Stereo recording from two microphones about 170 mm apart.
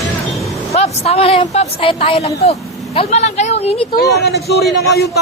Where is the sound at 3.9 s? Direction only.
65° left (ahead or behind).